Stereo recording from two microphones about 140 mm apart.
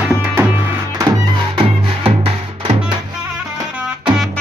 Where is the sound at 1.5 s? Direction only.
40° right (ahead or behind).